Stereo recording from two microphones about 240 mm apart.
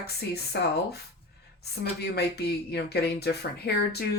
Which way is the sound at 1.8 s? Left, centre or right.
Left.